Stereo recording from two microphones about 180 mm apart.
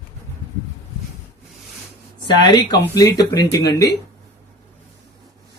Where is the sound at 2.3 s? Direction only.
25° left (ahead or behind).